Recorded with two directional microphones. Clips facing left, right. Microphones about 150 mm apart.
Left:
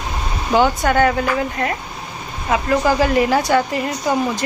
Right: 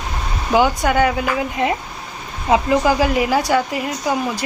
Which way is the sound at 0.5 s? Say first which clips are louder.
Even; 10° right (ahead or behind).